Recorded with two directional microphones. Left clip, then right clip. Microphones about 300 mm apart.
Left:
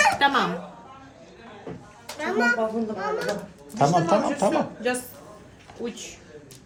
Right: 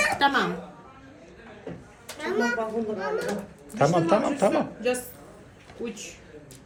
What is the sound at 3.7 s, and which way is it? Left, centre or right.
Speech, centre.